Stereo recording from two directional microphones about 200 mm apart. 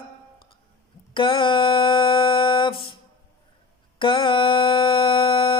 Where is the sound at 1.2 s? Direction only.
25° left (ahead or behind).